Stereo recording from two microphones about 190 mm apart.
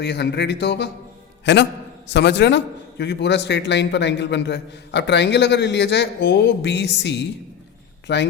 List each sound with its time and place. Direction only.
0.0 s a man's voice: 60° left (ahead or behind)